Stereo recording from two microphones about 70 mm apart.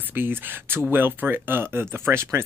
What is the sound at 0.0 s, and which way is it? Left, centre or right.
Speech, right.